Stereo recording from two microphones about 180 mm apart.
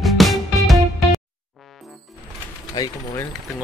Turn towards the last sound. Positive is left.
turn(degrees=20)  # may be behind; listen again after turning